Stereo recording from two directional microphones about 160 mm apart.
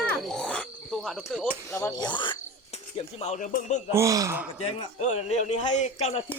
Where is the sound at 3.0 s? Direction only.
45° left (ahead or behind).